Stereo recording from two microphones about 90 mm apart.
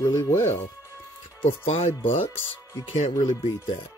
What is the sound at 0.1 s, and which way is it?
Speech, 30° left (ahead or behind).